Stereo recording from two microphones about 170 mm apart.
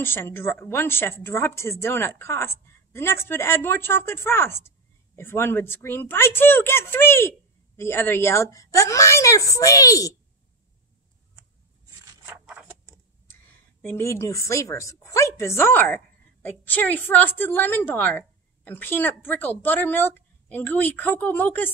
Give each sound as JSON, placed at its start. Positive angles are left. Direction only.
{"t": 0.0, "sound": "speech", "side_deg": 15}
{"t": 12.0, "sound": "a sound", "side_deg": -10}
{"t": 13.8, "sound": "speech", "side_deg": 15}